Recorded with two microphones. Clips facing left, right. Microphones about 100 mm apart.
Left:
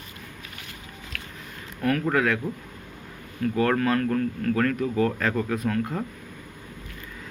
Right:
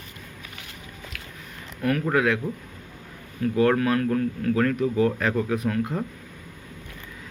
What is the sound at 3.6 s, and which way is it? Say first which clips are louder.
Speech: right 2 dB; 20° right (ahead or behind).